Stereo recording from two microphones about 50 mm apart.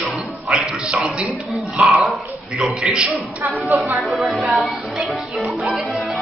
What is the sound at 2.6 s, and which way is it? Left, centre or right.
Speech, centre.